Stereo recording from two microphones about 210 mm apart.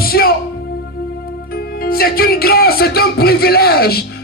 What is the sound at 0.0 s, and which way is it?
Music, 45° left (ahead or behind).